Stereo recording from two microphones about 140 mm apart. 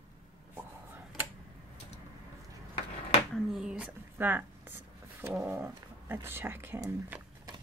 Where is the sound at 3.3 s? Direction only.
5° right (ahead or behind).